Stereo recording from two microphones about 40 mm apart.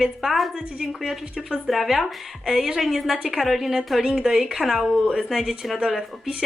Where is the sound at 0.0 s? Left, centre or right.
Centre.